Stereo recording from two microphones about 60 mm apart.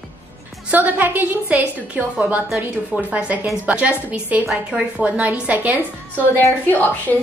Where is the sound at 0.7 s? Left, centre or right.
Right.